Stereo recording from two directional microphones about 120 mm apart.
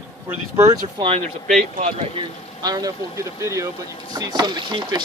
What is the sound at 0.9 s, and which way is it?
Speech, 50° right (ahead or behind).